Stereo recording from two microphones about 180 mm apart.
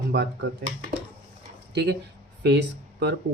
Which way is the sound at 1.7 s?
65° right (ahead or behind).